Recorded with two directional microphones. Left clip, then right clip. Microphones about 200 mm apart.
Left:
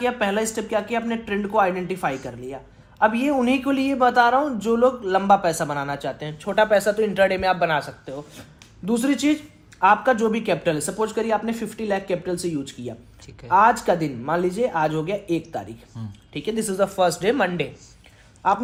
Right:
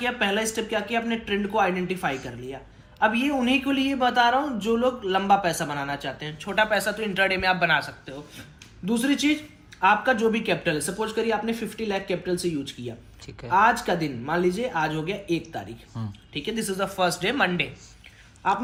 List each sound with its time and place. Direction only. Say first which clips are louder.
0.0 s speech: left 2 dB; 40° left (ahead or behind)
15.9 s speech: right 6 dB; centre (ahead or behind)
16.3 s speech: left 3 dB; 45° left (ahead or behind)